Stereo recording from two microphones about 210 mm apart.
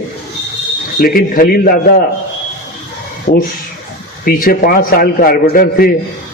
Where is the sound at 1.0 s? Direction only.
45° left (ahead or behind).